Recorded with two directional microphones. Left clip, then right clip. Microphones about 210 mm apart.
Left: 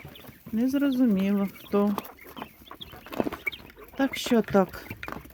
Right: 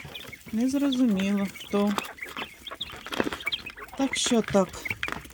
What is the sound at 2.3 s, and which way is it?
Chicken, 15° left (ahead or behind).